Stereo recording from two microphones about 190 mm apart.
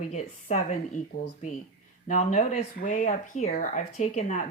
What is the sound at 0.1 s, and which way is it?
Speech, 35° left (ahead or behind).